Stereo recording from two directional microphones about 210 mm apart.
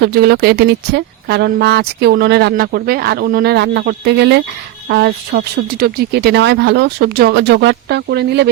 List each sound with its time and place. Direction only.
0.0 s speech: 50° right (ahead or behind)